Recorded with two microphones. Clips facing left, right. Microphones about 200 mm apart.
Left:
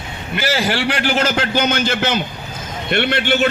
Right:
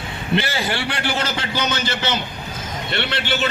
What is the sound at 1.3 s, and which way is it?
Speech, 50° left (ahead or behind).